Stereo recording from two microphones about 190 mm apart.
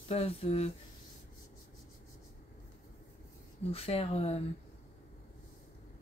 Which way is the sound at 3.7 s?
30° left (ahead or behind).